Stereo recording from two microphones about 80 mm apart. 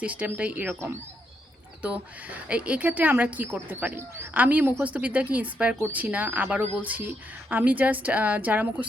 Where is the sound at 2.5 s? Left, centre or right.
Centre.